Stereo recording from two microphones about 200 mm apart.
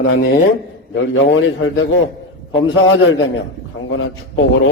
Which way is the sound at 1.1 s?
70° left (ahead or behind).